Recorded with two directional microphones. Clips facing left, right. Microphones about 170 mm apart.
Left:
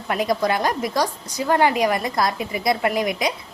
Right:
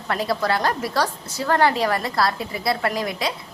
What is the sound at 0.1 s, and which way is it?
A woman's voice, 15° left (ahead or behind).